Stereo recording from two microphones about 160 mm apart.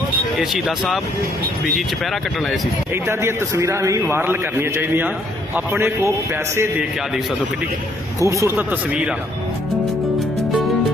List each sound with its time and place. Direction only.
0.3 s speech: 5° right (ahead or behind)
2.9 s a man's voice: 15° right (ahead or behind)
8.2 s a man's voice: 20° right (ahead or behind)